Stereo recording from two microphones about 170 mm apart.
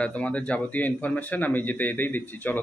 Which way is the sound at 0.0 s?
5° left (ahead or behind).